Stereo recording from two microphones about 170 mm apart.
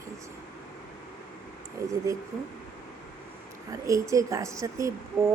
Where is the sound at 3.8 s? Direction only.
20° right (ahead or behind).